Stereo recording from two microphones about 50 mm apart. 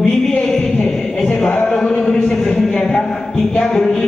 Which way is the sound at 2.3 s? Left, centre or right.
Centre.